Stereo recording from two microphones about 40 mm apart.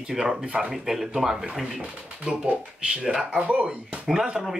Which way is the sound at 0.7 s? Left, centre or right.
Centre.